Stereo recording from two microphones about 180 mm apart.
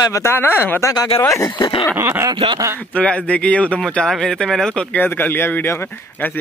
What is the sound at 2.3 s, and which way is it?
Speech, 30° right (ahead or behind).